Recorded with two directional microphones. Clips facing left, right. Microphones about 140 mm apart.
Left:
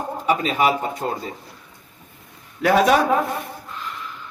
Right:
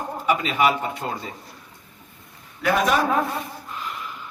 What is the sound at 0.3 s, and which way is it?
A man's voice, 35° left (ahead or behind).